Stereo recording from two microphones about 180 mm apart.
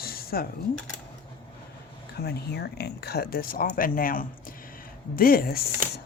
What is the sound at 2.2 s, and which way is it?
Speech, 60° left (ahead or behind).